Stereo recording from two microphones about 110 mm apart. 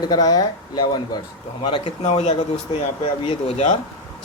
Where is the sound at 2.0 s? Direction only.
85° left.